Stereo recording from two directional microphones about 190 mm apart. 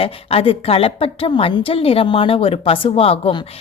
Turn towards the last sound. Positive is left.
turn(degrees=30)  # may be behind; listen again after turning